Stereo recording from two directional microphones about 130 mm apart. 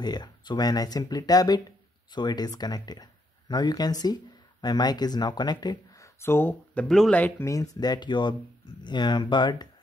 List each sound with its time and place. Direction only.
0.0 s speech: 35° left (ahead or behind)
6.2 s speech: 15° left (ahead or behind); by 9.7 s 35° left (ahead or behind)